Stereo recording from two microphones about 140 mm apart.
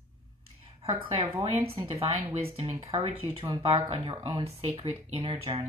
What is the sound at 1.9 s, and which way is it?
Speech, 45° right (ahead or behind).